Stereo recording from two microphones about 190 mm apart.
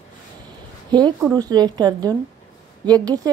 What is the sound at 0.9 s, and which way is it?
Speech, 20° right (ahead or behind).